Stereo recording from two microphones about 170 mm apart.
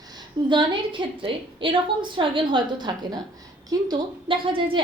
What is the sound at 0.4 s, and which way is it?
A woman's voice, 30° right (ahead or behind).